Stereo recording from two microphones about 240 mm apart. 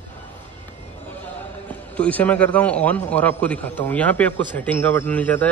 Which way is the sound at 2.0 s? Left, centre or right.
Centre.